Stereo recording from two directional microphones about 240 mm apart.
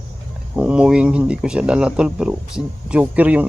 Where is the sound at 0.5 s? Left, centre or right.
Centre.